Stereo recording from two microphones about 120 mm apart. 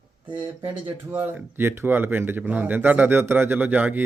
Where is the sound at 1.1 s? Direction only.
15° right (ahead or behind).